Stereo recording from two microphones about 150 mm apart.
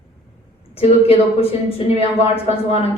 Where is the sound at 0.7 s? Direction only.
40° left (ahead or behind).